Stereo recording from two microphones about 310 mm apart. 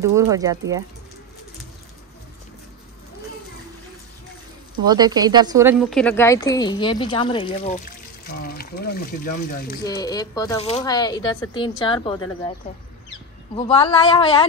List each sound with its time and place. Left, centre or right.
0.0 s speech: centre
4.8 s speech: centre
8.3 s speech: left
9.8 s speech: centre
13.6 s speech: centre